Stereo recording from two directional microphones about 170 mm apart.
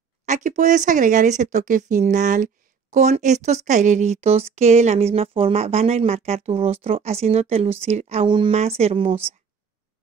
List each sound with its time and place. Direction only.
0.3 s speech: 45° right (ahead or behind)